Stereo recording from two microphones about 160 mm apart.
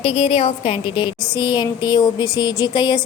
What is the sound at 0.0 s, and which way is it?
A woman's voice, 40° left (ahead or behind).